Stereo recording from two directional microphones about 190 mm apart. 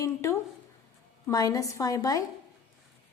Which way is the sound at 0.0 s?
15° left (ahead or behind).